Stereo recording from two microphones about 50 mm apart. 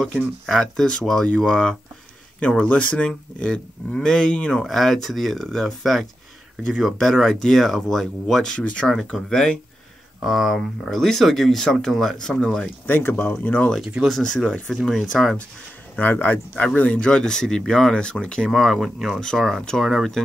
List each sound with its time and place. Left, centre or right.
0.5 s speech: centre
2.4 s speech: left
4.6 s speech: centre
8.5 s speech: left
9.1 s speech: centre
10.2 s speech: centre
10.9 s speech: centre
12.8 s speech: left
14.0 s speech: centre
16.1 s speech: left
17.1 s speech: centre
18.5 s speech: centre
19.8 s speech: centre